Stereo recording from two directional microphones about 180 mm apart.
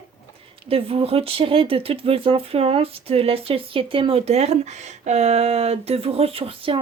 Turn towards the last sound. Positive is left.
turn(degrees=-30)  # may be behind; listen again after turning